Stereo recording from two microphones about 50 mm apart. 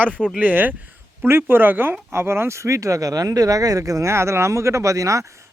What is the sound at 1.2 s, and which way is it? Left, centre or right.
Speech, right.